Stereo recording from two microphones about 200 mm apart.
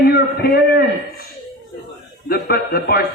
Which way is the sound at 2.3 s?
50° left (ahead or behind).